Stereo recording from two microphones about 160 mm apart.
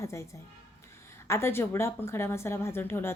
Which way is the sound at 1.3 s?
15° left (ahead or behind).